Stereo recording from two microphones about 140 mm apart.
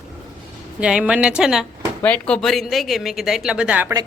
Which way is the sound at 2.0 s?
10° left (ahead or behind).